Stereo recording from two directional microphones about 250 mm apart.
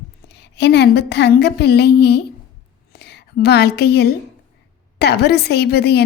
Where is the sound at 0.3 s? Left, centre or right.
Left.